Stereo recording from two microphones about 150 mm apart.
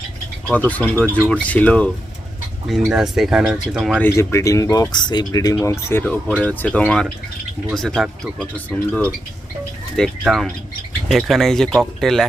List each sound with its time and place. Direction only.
0.7 s speech: 10° left (ahead or behind)
2.6 s speech: centre (ahead or behind)
4.0 s speech: 20° left (ahead or behind)
5.9 s speech: 10° left (ahead or behind)